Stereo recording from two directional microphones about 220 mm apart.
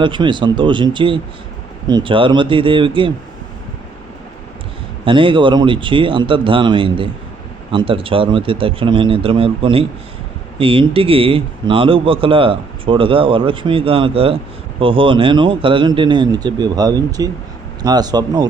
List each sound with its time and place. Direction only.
0.0 s speech: 20° right (ahead or behind)
5.0 s speech: 20° right (ahead or behind)